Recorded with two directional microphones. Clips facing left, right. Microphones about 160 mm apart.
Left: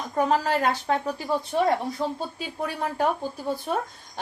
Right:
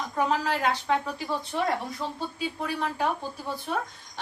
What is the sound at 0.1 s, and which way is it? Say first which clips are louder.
A woman's voice: left 4 dB; 45° left (ahead or behind).